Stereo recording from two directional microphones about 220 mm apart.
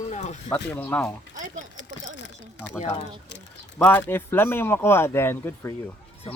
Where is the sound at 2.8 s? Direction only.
30° left (ahead or behind).